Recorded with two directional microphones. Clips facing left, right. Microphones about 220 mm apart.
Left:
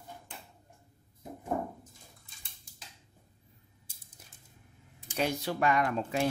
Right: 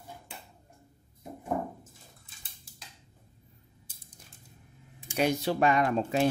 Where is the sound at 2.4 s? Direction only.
Centre (ahead or behind).